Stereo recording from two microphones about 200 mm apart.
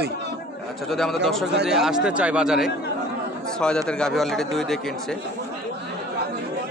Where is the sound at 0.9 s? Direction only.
Centre (ahead or behind).